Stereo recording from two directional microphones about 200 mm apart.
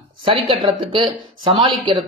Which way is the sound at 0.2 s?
25° right (ahead or behind).